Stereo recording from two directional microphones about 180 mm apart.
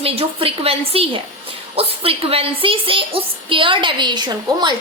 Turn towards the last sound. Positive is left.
turn(degrees=-25)  # may be behind; listen again after turning